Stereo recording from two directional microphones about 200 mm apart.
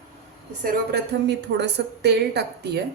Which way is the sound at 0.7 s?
55° right (ahead or behind).